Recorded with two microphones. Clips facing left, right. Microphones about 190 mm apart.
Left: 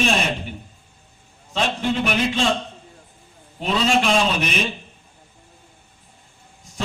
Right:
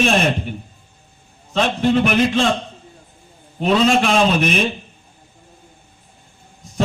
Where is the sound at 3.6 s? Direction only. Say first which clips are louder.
Right 5 dB; 50° right (ahead or behind).